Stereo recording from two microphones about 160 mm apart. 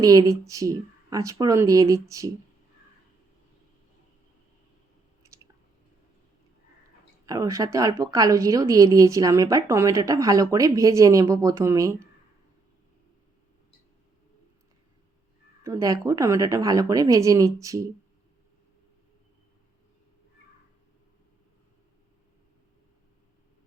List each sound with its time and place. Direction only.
0.0 s a woman's voice: 20° right (ahead or behind)
7.3 s a woman's voice: 20° right (ahead or behind)
15.6 s a woman's voice: 20° right (ahead or behind)